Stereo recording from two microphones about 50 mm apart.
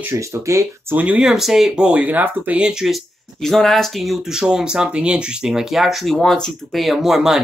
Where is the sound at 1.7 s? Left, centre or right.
Right.